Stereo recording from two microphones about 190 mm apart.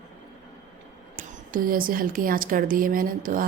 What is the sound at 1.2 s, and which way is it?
A woman's voice, 45° right (ahead or behind).